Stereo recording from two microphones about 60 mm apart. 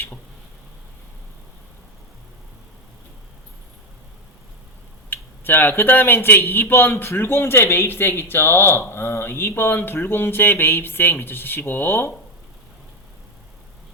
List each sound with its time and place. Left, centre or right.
5.0 s speech: left